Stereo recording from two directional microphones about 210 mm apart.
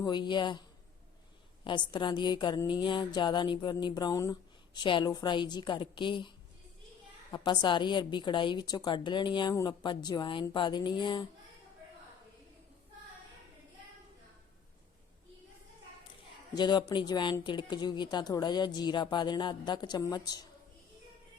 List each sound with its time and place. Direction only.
0.0 s speech: 20° left (ahead or behind)
1.6 s speech: 20° left (ahead or behind)
16.6 s speech: 20° left (ahead or behind)